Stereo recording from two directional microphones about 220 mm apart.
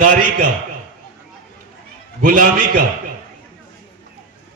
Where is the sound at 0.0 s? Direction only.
40° right (ahead or behind).